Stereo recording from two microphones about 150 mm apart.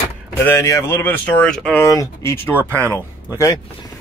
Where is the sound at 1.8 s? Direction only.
20° left (ahead or behind).